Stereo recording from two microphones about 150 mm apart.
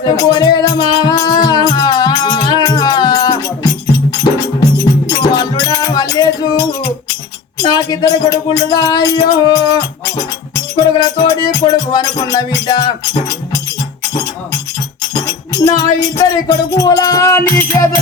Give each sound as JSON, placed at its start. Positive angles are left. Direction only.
{"t": 0.0, "sound": "music", "side_deg": 25}
{"t": 5.0, "sound": "music", "side_deg": 25}
{"t": 7.6, "sound": "speech", "side_deg": 25}
{"t": 15.5, "sound": "speech", "side_deg": 25}